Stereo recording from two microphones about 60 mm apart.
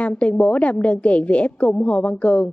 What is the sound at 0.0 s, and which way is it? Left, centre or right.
Speech, left.